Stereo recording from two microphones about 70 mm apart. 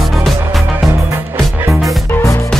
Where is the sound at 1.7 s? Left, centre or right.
Centre.